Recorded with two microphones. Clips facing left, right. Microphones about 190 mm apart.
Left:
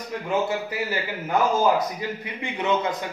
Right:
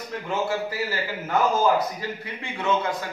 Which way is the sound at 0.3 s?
20° left (ahead or behind).